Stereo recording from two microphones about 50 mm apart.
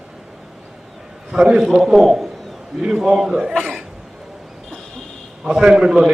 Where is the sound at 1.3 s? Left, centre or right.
Centre.